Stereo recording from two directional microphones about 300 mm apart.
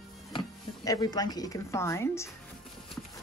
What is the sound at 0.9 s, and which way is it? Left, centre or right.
A woman's voice, centre.